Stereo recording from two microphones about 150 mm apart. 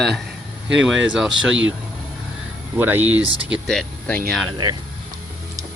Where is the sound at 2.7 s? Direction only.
10° right (ahead or behind).